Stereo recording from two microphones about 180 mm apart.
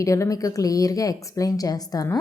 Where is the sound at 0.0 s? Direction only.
15° left (ahead or behind).